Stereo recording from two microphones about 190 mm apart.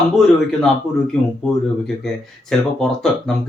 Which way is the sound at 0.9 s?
40° left (ahead or behind).